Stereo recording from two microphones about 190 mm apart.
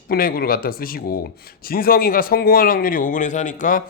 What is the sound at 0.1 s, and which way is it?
Speech, 50° left (ahead or behind).